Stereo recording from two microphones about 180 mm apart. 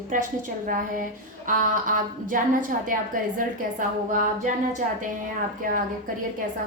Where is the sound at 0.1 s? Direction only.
50° right (ahead or behind).